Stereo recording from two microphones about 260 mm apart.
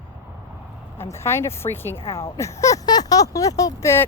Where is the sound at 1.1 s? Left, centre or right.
Centre.